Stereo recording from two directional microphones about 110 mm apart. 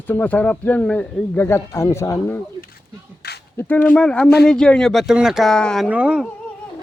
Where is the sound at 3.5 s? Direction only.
15° left (ahead or behind).